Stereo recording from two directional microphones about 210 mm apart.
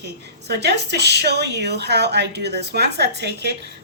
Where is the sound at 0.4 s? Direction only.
50° right (ahead or behind).